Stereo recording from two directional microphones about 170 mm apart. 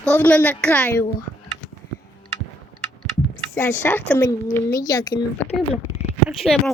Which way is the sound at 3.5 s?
15° left (ahead or behind).